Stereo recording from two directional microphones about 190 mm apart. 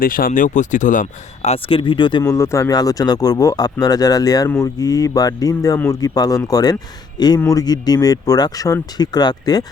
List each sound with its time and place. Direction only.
0.0 s speech: 50° left (ahead or behind); by 9.6 s 20° left (ahead or behind)